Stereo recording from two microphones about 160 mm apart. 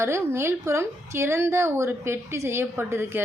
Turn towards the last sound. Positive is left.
turn(degrees=-15)  # may be behind; listen again after turning